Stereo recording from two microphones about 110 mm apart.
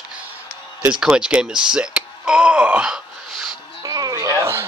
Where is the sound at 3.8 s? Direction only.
35° right (ahead or behind).